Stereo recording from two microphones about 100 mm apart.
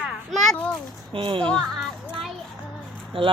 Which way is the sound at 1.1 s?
60° right (ahead or behind).